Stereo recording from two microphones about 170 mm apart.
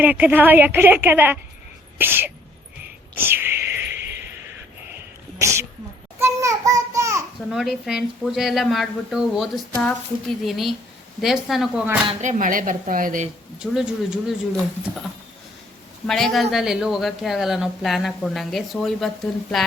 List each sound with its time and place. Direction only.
0.0 s a woman's voice: 10° right (ahead or behind)
3.2 s a sound: 15° right (ahead or behind)
6.1 s a woman's voice: 15° right (ahead or behind)
7.5 s speech: centre (ahead or behind)
12.2 s speech: 50° right (ahead or behind)
13.6 s speech: 5° right (ahead or behind)
16.0 s speech: centre (ahead or behind)